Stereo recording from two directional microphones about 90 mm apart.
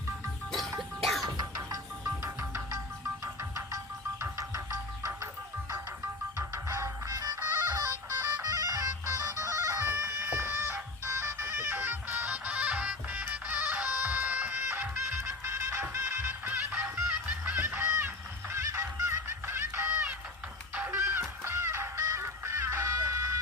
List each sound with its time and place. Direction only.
0.8 s music: centre (ahead or behind)
1.4 s music: 40° right (ahead or behind)
4.2 s music: 35° right (ahead or behind)
6.3 s music: 35° right (ahead or behind)
7.3 s music: 25° right (ahead or behind)
7.7 s music: 40° right (ahead or behind); by 18.1 s 20° right (ahead or behind)
18.5 s honk: 30° right (ahead or behind)
19.9 s a sound: 15° right (ahead or behind)
20.7 s honk: 25° right (ahead or behind)